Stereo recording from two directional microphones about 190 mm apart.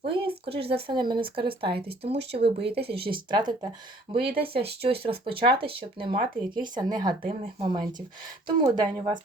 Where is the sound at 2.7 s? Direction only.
60° right (ahead or behind).